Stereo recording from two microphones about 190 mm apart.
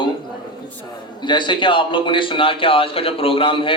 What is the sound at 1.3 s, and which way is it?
Speech, 25° left (ahead or behind).